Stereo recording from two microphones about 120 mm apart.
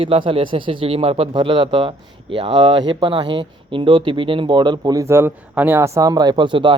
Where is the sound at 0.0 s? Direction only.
45° right (ahead or behind).